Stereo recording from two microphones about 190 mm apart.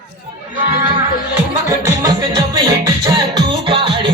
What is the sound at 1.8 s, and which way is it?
Music, 20° right (ahead or behind).